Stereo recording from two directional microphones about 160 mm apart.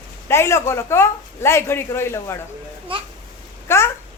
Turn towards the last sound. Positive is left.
turn(degrees=15)  # may be behind; listen again after turning